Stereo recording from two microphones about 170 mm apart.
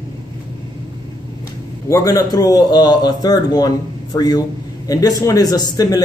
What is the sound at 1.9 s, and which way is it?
Speech, 20° left (ahead or behind).